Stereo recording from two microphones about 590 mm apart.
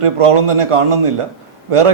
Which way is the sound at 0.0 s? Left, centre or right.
Right.